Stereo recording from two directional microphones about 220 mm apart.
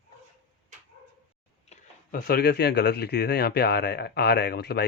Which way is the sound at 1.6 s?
40° left (ahead or behind).